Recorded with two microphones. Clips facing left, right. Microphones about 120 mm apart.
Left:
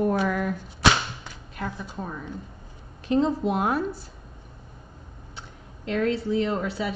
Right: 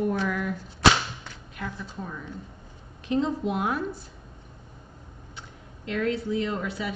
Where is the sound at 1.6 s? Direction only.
40° left (ahead or behind).